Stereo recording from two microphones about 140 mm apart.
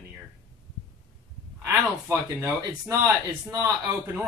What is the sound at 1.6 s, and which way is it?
Speech, 20° right (ahead or behind).